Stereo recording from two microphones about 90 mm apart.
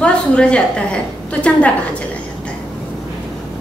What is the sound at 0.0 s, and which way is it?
Speech, 10° left (ahead or behind).